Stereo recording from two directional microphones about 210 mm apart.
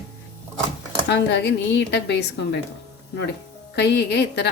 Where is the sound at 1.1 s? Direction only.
55° left (ahead or behind).